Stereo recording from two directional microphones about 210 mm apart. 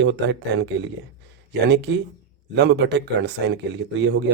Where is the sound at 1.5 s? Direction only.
55° right (ahead or behind).